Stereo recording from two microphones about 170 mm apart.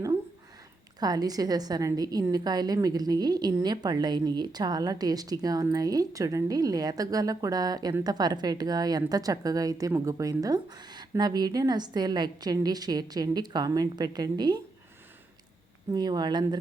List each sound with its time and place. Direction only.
0.9 s a woman's voice: 20° right (ahead or behind)
15.9 s a woman's voice: 25° right (ahead or behind)